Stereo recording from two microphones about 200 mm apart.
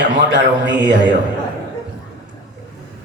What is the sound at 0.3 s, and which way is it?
Speech, 60° right (ahead or behind).